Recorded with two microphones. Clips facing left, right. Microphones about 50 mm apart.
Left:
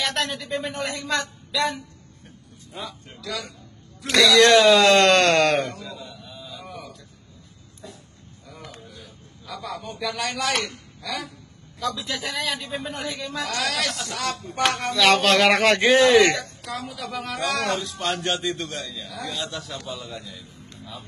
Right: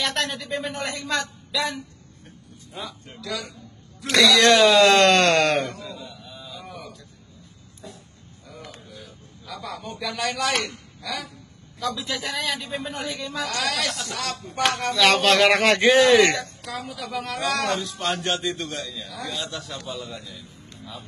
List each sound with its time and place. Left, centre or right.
0.0 s speech: centre
2.7 s a man's voice: centre
4.0 s a sound: centre
9.6 s a man's voice: centre